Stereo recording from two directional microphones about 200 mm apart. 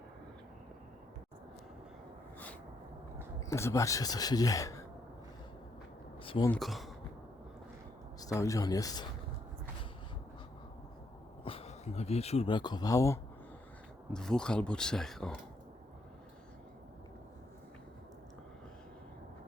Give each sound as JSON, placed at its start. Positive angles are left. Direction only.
{"t": 3.5, "sound": "speech", "side_deg": 15}
{"t": 6.2, "sound": "a sound", "side_deg": 25}
{"t": 6.5, "sound": "speech", "side_deg": 0}
{"t": 8.2, "sound": "speech", "side_deg": 15}
{"t": 11.4, "sound": "speech", "side_deg": 30}
{"t": 14.1, "sound": "speech", "side_deg": 5}